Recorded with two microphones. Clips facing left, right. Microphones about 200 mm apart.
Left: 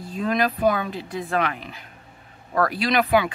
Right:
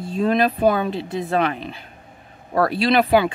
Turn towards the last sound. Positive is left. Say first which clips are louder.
# right 4 dB
turn(degrees=-30)  # may be behind; listen again after turning